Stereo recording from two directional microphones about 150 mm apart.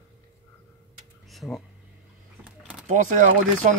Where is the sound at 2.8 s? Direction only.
55° right (ahead or behind).